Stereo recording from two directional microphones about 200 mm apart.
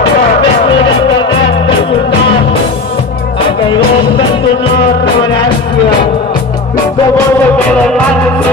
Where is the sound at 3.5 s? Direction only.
25° left (ahead or behind).